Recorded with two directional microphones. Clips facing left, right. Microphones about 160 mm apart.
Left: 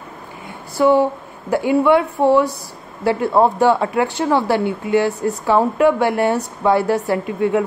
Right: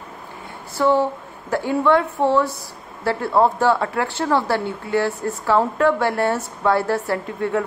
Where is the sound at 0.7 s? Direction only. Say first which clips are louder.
Left 4 dB; 15° left (ahead or behind).